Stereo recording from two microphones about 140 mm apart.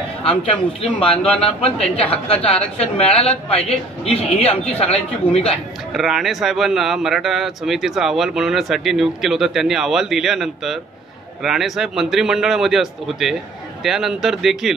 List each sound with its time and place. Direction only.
0.2 s a man's voice: 45° left (ahead or behind)
5.9 s speech: centre (ahead or behind)